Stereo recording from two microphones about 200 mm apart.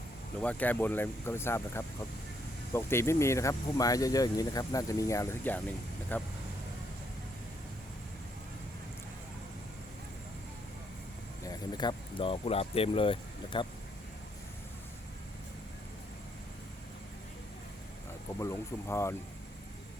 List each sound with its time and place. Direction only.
0.4 s speech: 5° left (ahead or behind)
11.4 s speech: 20° left (ahead or behind)
18.3 s speech: 15° left (ahead or behind)